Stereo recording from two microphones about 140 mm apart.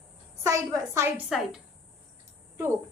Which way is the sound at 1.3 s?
Centre (ahead or behind).